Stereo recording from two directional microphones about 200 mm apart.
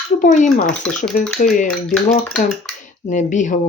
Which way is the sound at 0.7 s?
5° left (ahead or behind).